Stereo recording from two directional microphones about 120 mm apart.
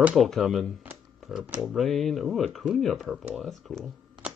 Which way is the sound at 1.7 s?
Centre (ahead or behind).